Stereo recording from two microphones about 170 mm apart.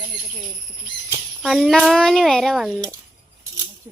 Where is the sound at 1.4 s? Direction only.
Centre (ahead or behind).